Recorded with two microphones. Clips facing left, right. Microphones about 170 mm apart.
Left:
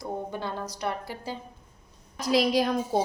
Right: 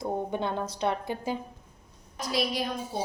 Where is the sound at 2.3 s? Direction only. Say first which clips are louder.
Left 7 dB; 90° left.